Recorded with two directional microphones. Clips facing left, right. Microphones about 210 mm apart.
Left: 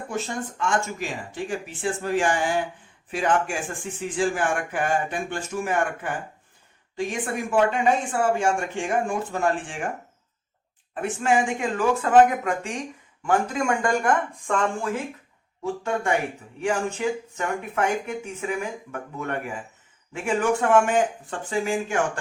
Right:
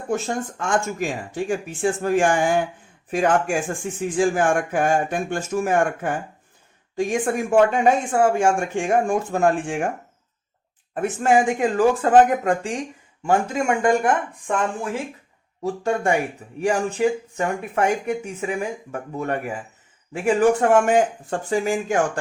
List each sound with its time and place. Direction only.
0.1 s speech: 50° right (ahead or behind)
11.0 s speech: 40° right (ahead or behind); by 14.5 s 20° right (ahead or behind)
16.6 s speech: 35° right (ahead or behind)